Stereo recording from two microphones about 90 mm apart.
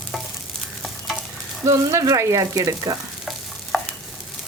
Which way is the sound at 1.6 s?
35° right (ahead or behind).